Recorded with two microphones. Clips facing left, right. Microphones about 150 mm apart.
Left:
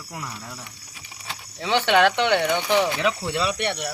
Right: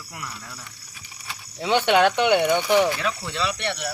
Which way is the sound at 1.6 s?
15° right (ahead or behind).